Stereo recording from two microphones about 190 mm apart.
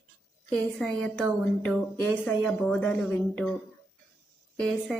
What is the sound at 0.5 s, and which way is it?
A woman's voice, 5° left (ahead or behind).